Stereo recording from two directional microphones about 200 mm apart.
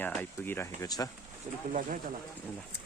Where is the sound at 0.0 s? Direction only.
10° left (ahead or behind).